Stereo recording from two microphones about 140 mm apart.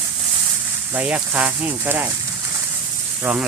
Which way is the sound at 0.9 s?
10° right (ahead or behind).